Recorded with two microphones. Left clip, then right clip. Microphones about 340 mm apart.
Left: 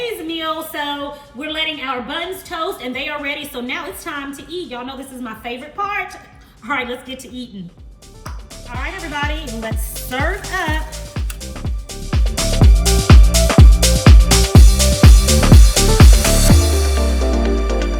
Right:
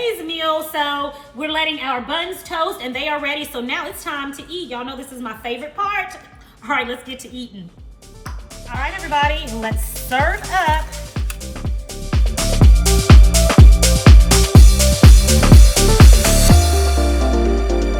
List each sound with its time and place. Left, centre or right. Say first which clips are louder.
0.0 s a sound: right 2 dB; centre
1.4 s a woman's voice: right 2 dB; centre
9.0 s speech: right 7 dB; centre
11.1 s music: even; centre